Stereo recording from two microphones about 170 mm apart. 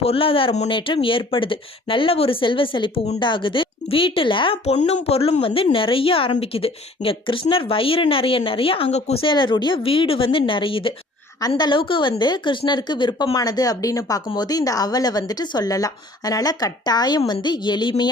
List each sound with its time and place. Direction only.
0.0 s speech: 35° left (ahead or behind)